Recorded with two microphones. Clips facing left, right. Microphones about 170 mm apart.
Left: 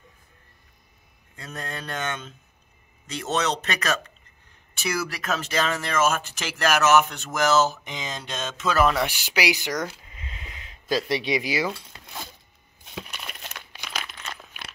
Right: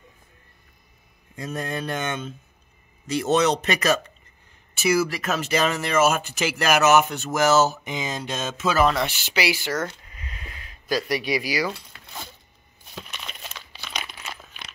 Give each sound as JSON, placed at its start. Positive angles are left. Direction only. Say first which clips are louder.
{"t": 1.3, "sound": "speech", "louder": "right 6 dB", "side_deg": -10}
{"t": 8.8, "sound": "speech", "louder": "right 1 dB", "side_deg": 10}
{"t": 12.9, "sound": "crumpling", "louder": "left 1 dB", "side_deg": 5}
{"t": 13.8, "sound": "crumpling", "louder": "right 1 dB", "side_deg": 0}